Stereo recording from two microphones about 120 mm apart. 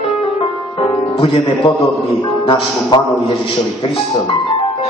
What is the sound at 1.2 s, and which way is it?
A man's voice, 45° left (ahead or behind).